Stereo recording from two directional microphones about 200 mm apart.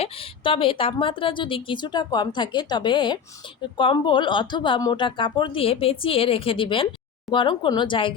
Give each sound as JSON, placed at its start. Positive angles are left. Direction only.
{"t": 0.0, "sound": "a woman's voice", "side_deg": 25}